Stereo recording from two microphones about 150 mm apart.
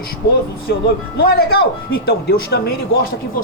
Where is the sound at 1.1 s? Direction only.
90° left.